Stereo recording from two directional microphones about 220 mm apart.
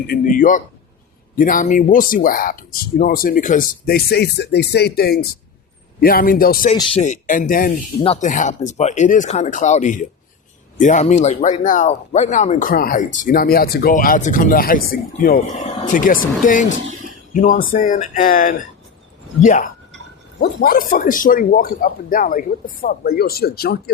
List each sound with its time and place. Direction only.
0.1 s speech: 40° left (ahead or behind)